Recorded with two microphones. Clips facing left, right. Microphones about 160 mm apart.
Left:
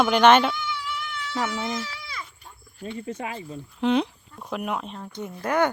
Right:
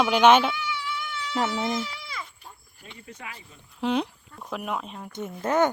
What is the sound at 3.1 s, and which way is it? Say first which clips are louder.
Speech: left 8 dB; 25° left (ahead or behind).